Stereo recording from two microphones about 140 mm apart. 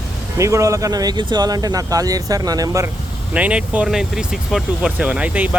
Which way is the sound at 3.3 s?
10° right (ahead or behind).